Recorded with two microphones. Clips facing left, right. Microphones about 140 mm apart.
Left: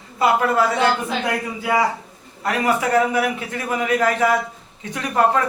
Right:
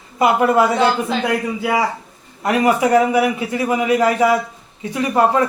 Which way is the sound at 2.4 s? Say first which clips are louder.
Right 5 dB; 15° right (ahead or behind).